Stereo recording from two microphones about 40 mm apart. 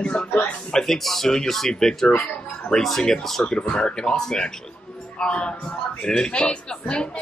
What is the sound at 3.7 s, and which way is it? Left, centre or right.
A man's voice, left.